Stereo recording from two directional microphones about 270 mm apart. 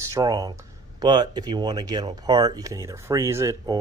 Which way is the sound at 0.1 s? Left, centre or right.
Centre.